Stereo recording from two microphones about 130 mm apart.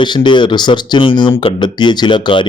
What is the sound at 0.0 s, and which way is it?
Speech, 35° left (ahead or behind).